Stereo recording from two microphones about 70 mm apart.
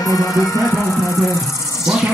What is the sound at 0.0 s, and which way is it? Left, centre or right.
Music, left.